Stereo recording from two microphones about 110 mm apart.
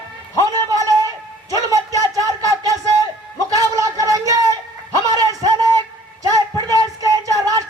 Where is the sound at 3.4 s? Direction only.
30° right (ahead or behind).